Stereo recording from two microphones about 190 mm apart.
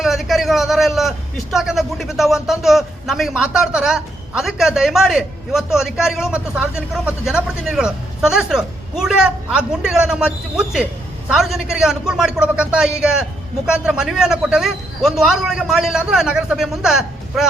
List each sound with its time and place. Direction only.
0.0 s a man's voice: centre (ahead or behind)